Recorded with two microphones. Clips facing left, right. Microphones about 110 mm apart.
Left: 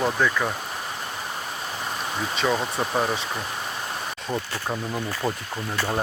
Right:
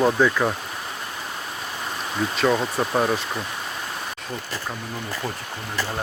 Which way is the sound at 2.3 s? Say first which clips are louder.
Right 3 dB; centre (ahead or behind).